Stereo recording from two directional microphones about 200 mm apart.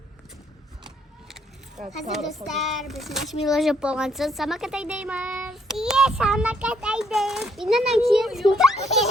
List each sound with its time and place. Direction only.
2.1 s a child's voice: centre (ahead or behind)